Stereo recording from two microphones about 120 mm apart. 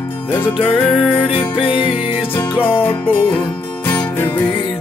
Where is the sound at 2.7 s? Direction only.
15° left (ahead or behind).